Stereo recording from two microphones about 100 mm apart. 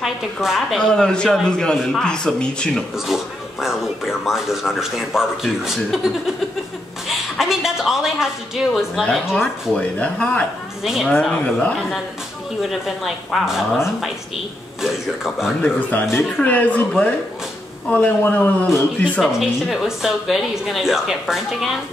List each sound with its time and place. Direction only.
0.0 s a man's voice: centre (ahead or behind)
3.1 s speech: 5° right (ahead or behind)
7.1 s a sound: 5° right (ahead or behind)
9.2 s a man's voice: centre (ahead or behind)
10.8 s speech: 5° right (ahead or behind)
11.1 s a man's voice: 10° left (ahead or behind)
12.6 s speech: centre (ahead or behind)
14.8 s speech: 5° right (ahead or behind)
15.6 s a man's voice: 15° left (ahead or behind)
19.2 s speech: centre (ahead or behind)